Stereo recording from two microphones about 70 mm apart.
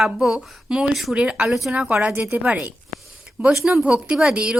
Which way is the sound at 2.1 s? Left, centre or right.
Right.